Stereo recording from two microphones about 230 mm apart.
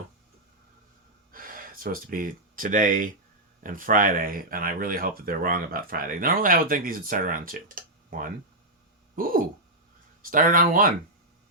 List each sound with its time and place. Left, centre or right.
1.3 s speech: right
10.3 s speech: right